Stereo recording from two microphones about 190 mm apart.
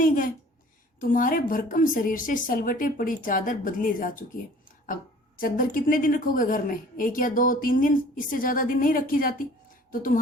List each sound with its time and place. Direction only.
0.0 s a woman's voice: 45° left (ahead or behind)
5.4 s a woman's voice: 45° left (ahead or behind)